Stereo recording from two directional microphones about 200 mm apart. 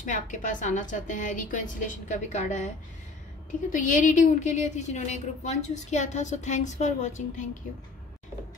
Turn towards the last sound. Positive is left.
turn(degrees=35)  # may be behind; listen again after turning